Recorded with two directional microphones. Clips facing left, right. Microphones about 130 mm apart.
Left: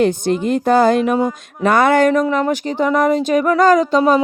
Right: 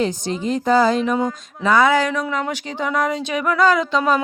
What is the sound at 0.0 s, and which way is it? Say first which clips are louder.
Speech: left 6 dB; 55° left (ahead or behind).